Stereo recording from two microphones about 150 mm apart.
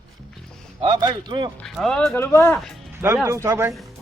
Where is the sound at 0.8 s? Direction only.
30° right (ahead or behind).